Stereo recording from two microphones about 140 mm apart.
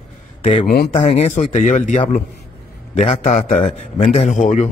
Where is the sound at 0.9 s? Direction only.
45° left (ahead or behind).